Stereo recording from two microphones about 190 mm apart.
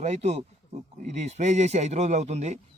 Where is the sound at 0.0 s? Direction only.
35° right (ahead or behind).